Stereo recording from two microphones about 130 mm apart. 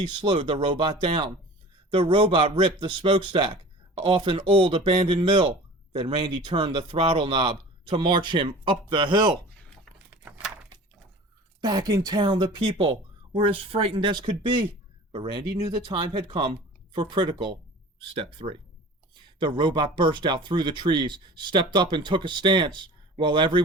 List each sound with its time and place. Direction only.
0.0 s a man's voice: 40° right (ahead or behind)
11.6 s a man's voice: 30° right (ahead or behind)